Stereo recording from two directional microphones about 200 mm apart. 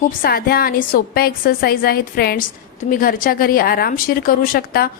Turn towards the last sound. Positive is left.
turn(degrees=45)  # may be behind; listen again after turning